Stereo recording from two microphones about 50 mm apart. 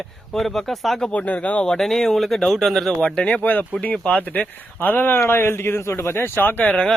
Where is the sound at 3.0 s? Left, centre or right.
Centre; by 6.1 s left.